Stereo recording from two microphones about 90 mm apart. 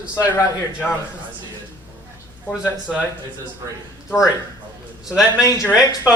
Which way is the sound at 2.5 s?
15° right (ahead or behind).